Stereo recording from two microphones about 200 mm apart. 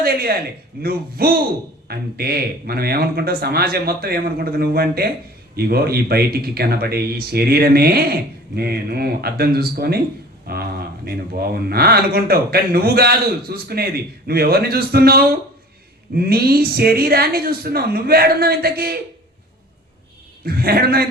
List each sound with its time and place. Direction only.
0.0 s speech: 50° right (ahead or behind)
20.4 s speech: 50° right (ahead or behind)